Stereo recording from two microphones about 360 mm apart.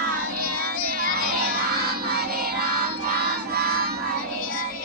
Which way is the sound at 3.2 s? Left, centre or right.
Right.